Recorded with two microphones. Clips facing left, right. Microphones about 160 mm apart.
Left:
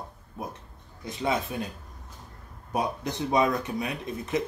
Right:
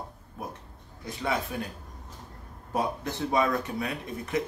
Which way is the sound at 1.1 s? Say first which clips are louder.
Left 2 dB; 20° left (ahead or behind).